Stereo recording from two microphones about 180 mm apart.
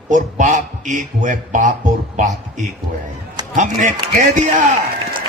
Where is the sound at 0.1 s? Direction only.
45° right (ahead or behind).